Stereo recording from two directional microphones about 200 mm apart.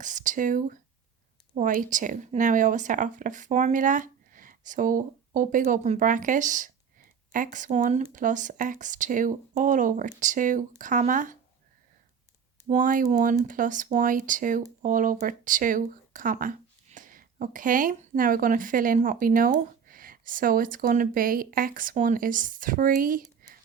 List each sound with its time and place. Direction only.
0.0 s speech: 40° right (ahead or behind)
12.6 s speech: 40° right (ahead or behind)
23.4 s whispering: 45° right (ahead or behind)